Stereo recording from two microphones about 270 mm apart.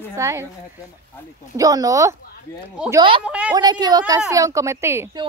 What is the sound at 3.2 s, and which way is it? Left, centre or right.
Speech, centre.